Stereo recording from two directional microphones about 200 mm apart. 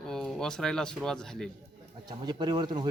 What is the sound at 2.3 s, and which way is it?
Speech, 20° right (ahead or behind).